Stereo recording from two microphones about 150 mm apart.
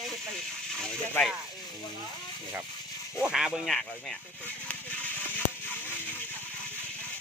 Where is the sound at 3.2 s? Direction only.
5° right (ahead or behind).